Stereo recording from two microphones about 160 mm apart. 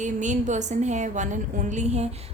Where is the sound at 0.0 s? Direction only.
50° right (ahead or behind).